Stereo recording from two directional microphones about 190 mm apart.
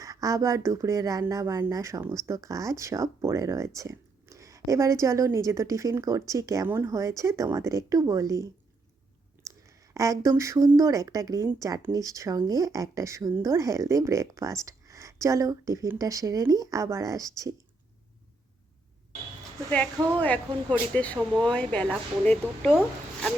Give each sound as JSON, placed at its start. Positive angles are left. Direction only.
{"t": 0.0, "sound": "speech", "side_deg": -15}
{"t": 20.1, "sound": "speech", "side_deg": 10}
{"t": 22.7, "sound": "speech", "side_deg": -5}